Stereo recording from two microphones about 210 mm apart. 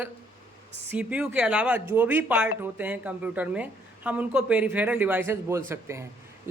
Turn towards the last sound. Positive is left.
turn(degrees=-15)  # may be behind; listen again after turning